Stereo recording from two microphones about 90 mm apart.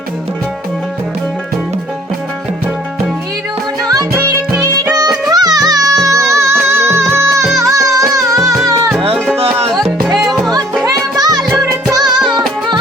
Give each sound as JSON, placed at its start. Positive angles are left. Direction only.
{"t": 4.6, "sound": "music", "side_deg": -45}
{"t": 9.1, "sound": "music", "side_deg": 5}
{"t": 10.8, "sound": "music", "side_deg": -45}
{"t": 11.6, "sound": "music", "side_deg": -30}
{"t": 11.9, "sound": "music", "side_deg": -50}
{"t": 12.2, "sound": "music", "side_deg": -10}